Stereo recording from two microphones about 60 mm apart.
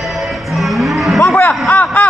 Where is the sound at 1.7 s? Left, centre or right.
Left.